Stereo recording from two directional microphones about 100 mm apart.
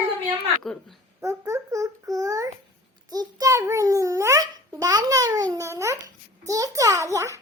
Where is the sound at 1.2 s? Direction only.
30° right (ahead or behind).